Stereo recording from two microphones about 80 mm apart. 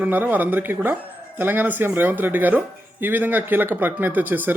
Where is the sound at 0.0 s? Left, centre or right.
Right.